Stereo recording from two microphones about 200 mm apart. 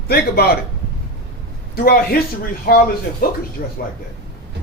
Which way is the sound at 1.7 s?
50° left (ahead or behind).